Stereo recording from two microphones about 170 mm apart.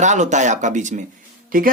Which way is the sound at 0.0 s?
45° right (ahead or behind).